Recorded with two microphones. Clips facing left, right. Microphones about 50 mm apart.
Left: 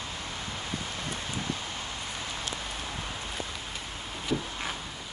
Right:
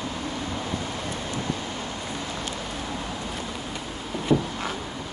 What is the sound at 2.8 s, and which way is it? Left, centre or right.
Vehicle, right.